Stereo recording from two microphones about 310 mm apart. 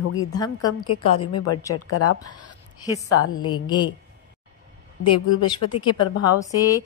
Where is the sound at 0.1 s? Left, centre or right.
Left.